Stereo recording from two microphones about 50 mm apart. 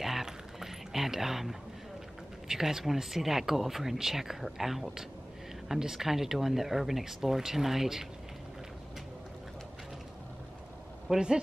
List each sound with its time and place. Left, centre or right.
0.0 s a sound: centre
2.4 s speech: centre
11.1 s speech: centre